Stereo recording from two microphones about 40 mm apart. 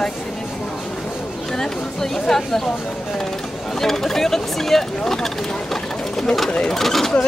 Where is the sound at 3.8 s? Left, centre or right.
Centre.